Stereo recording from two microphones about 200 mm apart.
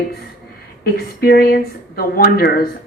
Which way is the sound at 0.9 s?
50° left (ahead or behind).